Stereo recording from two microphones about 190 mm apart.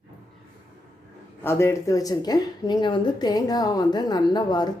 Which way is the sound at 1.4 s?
15° left (ahead or behind).